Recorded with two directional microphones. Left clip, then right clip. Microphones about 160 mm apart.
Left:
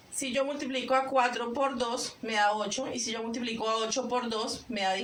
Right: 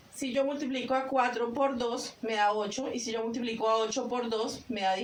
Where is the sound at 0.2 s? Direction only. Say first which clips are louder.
Even; 20° left (ahead or behind).